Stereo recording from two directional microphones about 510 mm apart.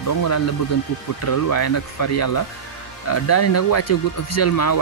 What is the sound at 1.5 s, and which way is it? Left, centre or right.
Speech, left.